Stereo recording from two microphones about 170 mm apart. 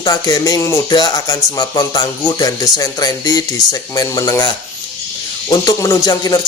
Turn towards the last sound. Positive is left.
turn(degrees=20)  # may be behind; listen again after turning